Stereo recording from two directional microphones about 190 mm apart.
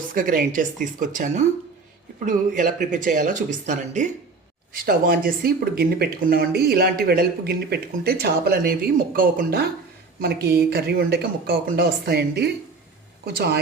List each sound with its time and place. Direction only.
0.1 s speech: 45° right (ahead or behind)